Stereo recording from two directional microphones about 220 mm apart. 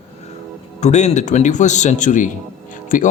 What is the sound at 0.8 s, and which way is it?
Speech, 30° left (ahead or behind).